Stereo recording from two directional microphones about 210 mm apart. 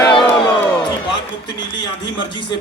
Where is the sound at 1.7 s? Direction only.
20° left (ahead or behind).